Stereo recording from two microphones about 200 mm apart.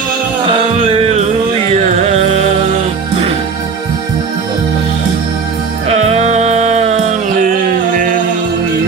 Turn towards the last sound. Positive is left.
turn(degrees=-35)  # may be behind; listen again after turning